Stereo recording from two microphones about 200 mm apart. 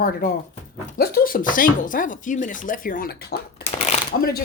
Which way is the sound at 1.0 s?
45° left (ahead or behind).